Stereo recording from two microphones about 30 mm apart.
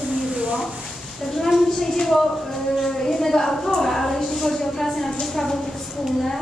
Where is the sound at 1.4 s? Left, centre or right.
Centre.